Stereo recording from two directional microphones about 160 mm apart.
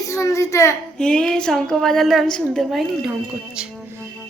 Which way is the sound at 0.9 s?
5° left (ahead or behind).